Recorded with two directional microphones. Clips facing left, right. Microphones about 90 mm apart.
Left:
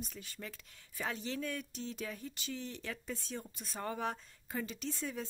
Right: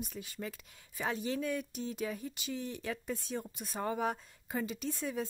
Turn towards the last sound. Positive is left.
turn(degrees=-10)  # may be behind; listen again after turning